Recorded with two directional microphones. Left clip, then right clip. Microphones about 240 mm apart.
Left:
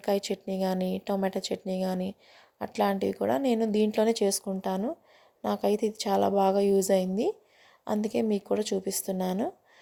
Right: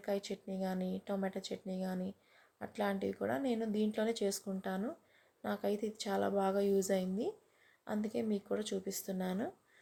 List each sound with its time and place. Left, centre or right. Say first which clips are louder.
0.0 s a woman's voice: left 10 dB; left